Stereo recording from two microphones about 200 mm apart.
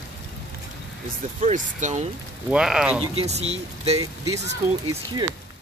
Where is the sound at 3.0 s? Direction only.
30° right (ahead or behind).